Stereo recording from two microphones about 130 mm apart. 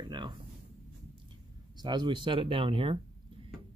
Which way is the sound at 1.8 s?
35° right (ahead or behind).